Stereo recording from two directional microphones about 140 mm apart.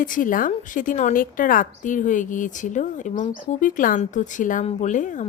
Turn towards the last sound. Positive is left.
turn(degrees=65)  # may be behind; listen again after turning